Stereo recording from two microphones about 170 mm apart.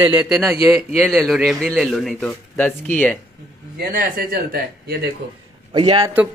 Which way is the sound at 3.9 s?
60° right (ahead or behind).